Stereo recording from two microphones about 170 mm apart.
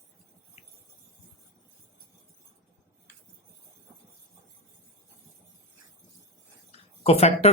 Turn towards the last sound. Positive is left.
turn(degrees=40)  # may be behind; listen again after turning